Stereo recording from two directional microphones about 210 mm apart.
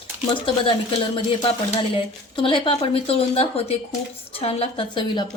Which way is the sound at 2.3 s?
25° left (ahead or behind).